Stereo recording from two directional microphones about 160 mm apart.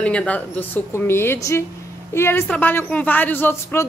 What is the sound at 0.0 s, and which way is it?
A woman's voice, 5° left (ahead or behind).